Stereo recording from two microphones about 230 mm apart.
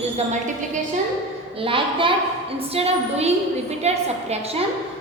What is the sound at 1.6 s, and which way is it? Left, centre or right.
A woman's voice, right.